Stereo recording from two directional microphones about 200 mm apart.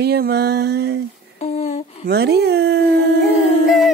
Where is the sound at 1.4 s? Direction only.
35° left (ahead or behind).